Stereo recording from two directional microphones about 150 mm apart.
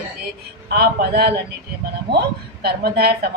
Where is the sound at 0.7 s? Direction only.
90° right.